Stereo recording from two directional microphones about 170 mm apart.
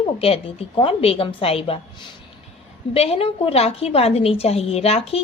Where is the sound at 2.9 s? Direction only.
35° left (ahead or behind).